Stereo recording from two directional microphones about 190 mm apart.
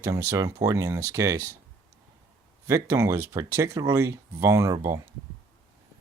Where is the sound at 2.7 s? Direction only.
15° right (ahead or behind).